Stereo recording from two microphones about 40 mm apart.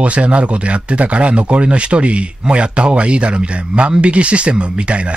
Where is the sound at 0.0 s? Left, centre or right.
Right.